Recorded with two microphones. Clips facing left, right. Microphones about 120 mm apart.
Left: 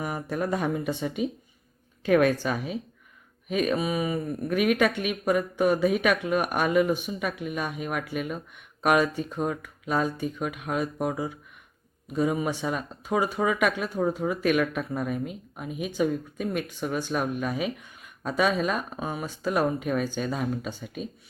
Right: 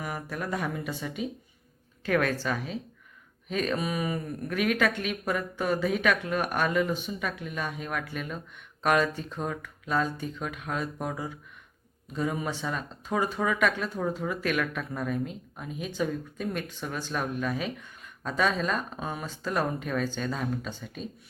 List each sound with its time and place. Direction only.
0.0 s a woman's voice: 25° left (ahead or behind)